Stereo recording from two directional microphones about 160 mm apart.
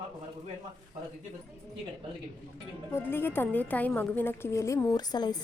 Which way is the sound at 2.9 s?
15° left (ahead or behind).